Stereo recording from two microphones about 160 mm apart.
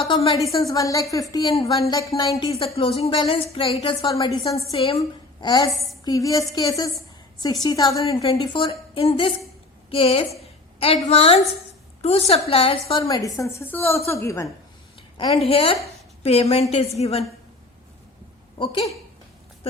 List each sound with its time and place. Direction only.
0.1 s speech: 35° left (ahead or behind)
0.5 s a woman's voice: 20° left (ahead or behind)
2.7 s speech: 35° left (ahead or behind)
4.0 s a woman's voice: 20° left (ahead or behind)
4.7 s speech: 35° left (ahead or behind)
5.7 s a woman's voice: centre (ahead or behind)
6.1 s a woman's voice: 20° left (ahead or behind)
15.2 s speech: 35° left (ahead or behind)
18.5 s speech: 30° left (ahead or behind)